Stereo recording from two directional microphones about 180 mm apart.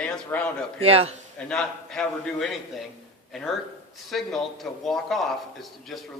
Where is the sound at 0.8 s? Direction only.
35° right (ahead or behind).